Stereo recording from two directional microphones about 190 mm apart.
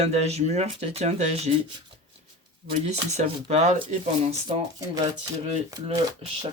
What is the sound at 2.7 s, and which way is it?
Speech, 35° right (ahead or behind).